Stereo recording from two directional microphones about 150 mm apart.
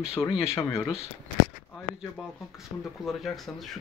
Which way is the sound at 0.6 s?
20° left (ahead or behind).